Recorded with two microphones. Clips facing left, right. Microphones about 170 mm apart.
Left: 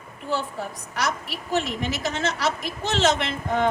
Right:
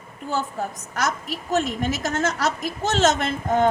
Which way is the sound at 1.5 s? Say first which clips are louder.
Right 2 dB; 45° right (ahead or behind).